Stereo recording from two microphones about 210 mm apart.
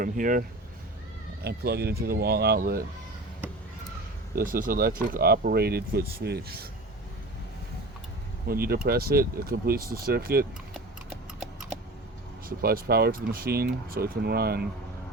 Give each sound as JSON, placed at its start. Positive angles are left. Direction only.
{"t": 0.0, "sound": "speech", "side_deg": -40}
{"t": 4.4, "sound": "speech", "side_deg": -40}
{"t": 8.4, "sound": "speech", "side_deg": -45}
{"t": 12.5, "sound": "speech", "side_deg": -45}